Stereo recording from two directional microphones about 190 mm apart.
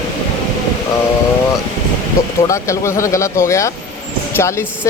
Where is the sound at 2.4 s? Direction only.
15° left (ahead or behind).